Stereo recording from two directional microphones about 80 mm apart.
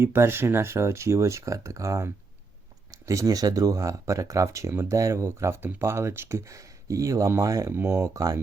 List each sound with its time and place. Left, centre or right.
0.0 s speech: right
7.7 s speech: right